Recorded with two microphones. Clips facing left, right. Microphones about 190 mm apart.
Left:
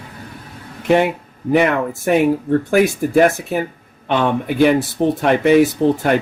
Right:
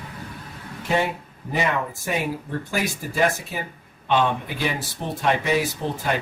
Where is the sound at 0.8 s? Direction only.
65° left (ahead or behind).